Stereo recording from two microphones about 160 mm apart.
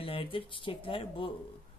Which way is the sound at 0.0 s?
35° left (ahead or behind).